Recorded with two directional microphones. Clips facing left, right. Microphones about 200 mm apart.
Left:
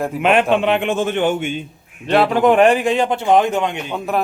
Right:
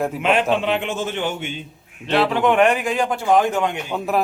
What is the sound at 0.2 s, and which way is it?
A man's voice, 60° left (ahead or behind).